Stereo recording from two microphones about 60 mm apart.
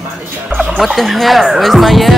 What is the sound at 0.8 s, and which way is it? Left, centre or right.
Speech, centre.